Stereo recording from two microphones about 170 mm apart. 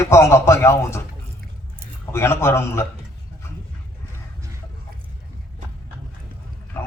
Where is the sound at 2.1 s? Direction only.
15° left (ahead or behind).